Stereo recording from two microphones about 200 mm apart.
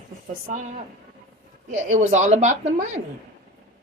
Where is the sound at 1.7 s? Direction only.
35° right (ahead or behind).